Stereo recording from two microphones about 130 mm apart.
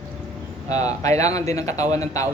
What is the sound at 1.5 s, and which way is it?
Speech, 25° left (ahead or behind).